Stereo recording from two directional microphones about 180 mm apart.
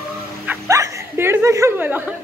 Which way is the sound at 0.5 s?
15° right (ahead or behind).